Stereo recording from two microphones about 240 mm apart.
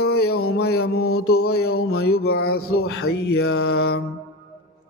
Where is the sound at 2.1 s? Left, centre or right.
Left.